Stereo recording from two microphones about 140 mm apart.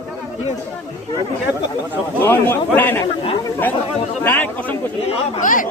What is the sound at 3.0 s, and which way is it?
Speech, 35° left (ahead or behind).